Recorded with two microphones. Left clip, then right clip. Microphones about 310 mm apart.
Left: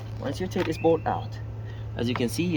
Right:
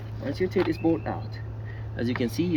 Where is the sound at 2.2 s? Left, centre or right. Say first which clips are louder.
Right 2 dB; left.